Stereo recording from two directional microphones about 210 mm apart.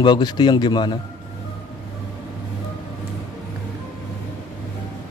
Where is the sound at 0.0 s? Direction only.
20° left (ahead or behind).